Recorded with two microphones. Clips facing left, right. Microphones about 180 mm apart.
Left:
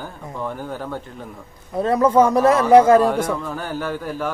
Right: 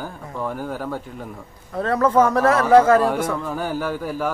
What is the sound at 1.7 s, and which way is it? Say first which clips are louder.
Speech: left 2 dB; 15° left (ahead or behind).